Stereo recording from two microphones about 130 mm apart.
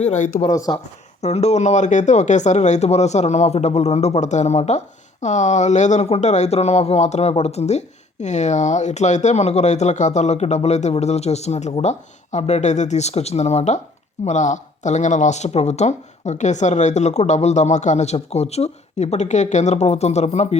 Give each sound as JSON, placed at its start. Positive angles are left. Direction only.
{"t": 0.0, "sound": "speech", "side_deg": 60}
{"t": 0.7, "sound": "speech", "side_deg": 35}
{"t": 1.2, "sound": "speech", "side_deg": 55}